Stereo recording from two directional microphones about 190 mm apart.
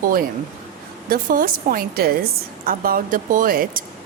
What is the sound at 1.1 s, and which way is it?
Speech, 50° right (ahead or behind).